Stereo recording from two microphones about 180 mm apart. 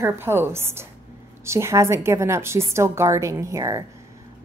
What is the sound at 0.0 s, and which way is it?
A woman's voice, 15° right (ahead or behind).